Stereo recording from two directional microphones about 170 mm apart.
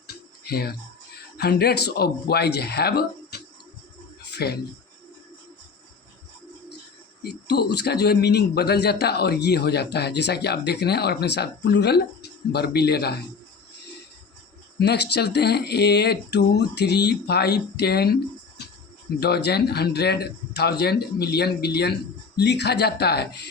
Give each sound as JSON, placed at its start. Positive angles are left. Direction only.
{"t": 0.4, "sound": "a man's voice", "side_deg": 65}
{"t": 7.2, "sound": "a man's voice", "side_deg": 70}
{"t": 14.8, "sound": "a man's voice", "side_deg": 75}
{"t": 19.2, "sound": "a man's voice", "side_deg": 75}